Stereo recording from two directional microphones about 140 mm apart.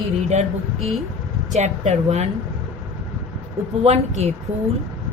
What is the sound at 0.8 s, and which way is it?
Speech, centre (ahead or behind).